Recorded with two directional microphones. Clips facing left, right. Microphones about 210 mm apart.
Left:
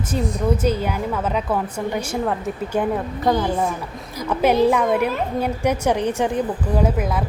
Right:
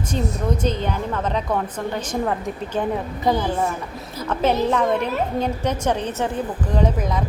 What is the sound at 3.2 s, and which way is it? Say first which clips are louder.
Speech: left 1 dB; 5° right (ahead or behind).